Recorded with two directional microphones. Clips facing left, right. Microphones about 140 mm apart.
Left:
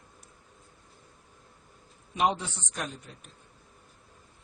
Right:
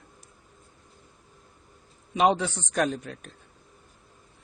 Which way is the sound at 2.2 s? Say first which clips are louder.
Right 5 dB; 90° right.